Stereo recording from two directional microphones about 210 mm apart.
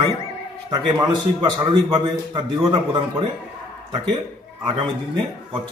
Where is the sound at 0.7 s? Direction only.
20° right (ahead or behind).